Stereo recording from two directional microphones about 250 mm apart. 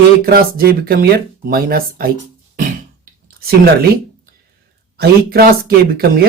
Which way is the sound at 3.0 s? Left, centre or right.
Right.